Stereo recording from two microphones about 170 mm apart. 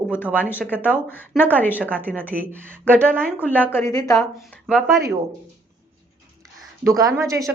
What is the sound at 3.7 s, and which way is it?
Speech, 20° left (ahead or behind).